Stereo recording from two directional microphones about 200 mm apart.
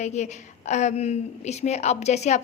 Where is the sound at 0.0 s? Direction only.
35° left (ahead or behind).